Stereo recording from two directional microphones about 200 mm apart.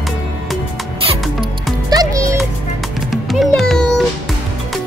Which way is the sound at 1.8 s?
15° right (ahead or behind).